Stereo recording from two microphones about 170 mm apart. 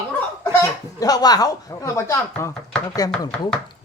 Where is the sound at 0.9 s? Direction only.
20° left (ahead or behind).